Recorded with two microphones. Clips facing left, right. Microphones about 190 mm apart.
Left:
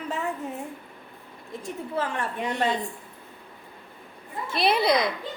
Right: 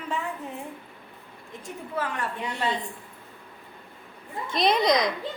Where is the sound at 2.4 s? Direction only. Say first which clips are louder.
Left 4 dB; 50° left (ahead or behind).